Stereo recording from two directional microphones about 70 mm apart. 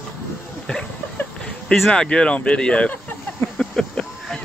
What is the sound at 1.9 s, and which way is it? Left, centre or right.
Speech, centre.